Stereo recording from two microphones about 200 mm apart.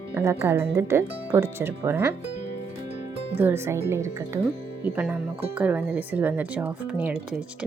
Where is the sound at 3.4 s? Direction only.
10° right (ahead or behind).